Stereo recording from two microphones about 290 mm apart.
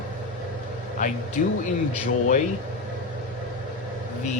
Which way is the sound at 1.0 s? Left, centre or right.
Left.